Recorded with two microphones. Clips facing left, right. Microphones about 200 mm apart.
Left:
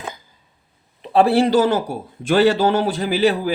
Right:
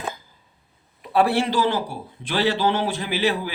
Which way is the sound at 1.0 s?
30° left (ahead or behind).